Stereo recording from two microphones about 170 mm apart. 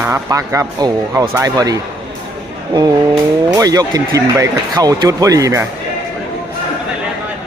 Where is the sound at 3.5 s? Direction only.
20° right (ahead or behind).